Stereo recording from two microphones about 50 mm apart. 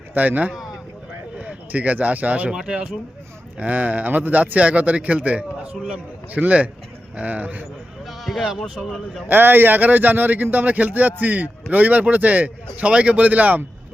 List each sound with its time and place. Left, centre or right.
0.1 s speech: right
2.6 s a man's voice: centre
3.6 s a man's voice: right
8.0 s a sound: centre
8.5 s speech: centre
9.3 s speech: right